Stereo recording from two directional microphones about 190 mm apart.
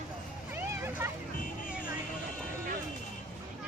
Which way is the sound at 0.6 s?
10° right (ahead or behind).